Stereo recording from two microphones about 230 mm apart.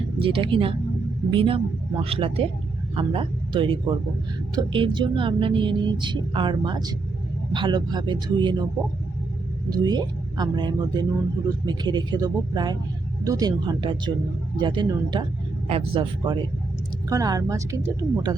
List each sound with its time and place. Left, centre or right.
0.2 s speech: right
9.6 s speech: centre